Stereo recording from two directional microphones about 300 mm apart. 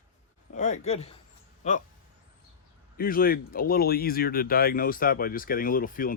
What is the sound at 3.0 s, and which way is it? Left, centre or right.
Speech, left.